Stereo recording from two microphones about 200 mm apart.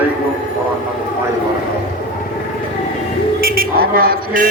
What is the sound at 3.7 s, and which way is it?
Speech, 45° right (ahead or behind).